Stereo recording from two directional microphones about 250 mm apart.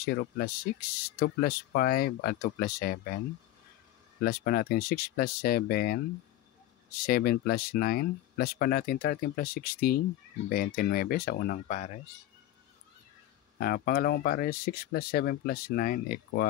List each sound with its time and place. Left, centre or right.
0.0 s speech: left
4.2 s speech: left
7.1 s speech: left
13.6 s speech: left